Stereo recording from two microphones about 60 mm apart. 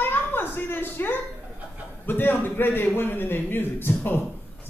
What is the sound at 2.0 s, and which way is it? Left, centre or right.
A woman's voice, left.